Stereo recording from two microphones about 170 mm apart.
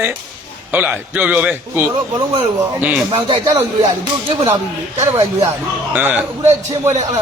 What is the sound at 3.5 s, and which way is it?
Speech, 20° right (ahead or behind).